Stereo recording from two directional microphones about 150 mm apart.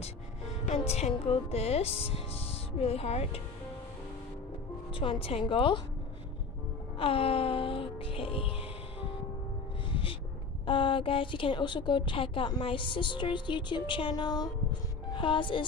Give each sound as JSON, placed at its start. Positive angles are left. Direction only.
{"t": 0.7, "sound": "a woman's voice", "side_deg": 45}
{"t": 4.9, "sound": "a woman's voice", "side_deg": 40}
{"t": 7.0, "sound": "music", "side_deg": 40}
{"t": 10.6, "sound": "a woman's voice", "side_deg": 35}